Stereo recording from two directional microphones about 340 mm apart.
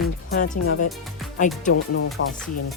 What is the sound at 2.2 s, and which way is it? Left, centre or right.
Speech, left.